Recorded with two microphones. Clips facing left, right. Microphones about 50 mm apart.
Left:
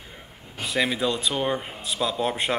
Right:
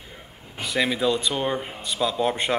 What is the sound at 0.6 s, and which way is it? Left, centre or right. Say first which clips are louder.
Speech: right 1 dB; centre.